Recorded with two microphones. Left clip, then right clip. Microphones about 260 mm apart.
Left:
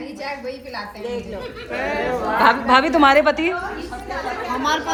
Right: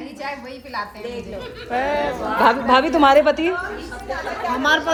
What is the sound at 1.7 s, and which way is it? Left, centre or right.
Speech, right.